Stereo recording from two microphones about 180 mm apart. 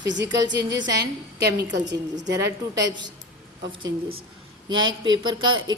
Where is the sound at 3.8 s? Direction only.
55° right (ahead or behind).